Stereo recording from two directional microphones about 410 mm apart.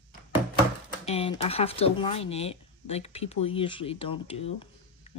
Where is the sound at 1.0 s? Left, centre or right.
Centre.